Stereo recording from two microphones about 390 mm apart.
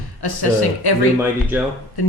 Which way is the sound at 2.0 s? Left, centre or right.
Left.